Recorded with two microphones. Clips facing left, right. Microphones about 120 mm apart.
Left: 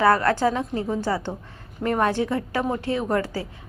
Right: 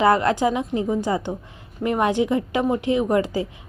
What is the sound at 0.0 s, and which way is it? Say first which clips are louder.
Speech: right 1 dB; 20° right (ahead or behind).